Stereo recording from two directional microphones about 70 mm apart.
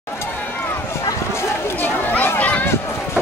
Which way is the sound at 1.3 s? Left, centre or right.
Left.